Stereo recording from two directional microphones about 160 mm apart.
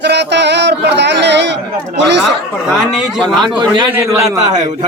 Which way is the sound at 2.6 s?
5° right (ahead or behind).